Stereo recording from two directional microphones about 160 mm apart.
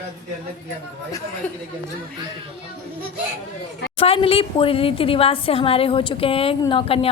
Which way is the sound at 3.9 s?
35° left (ahead or behind).